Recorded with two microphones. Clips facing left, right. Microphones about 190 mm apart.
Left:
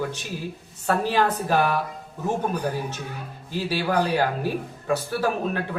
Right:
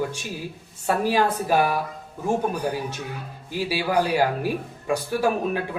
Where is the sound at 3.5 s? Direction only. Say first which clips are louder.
Even; 10° right (ahead or behind).